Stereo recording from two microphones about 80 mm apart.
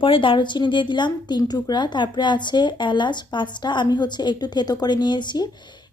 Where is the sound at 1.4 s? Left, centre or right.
Left.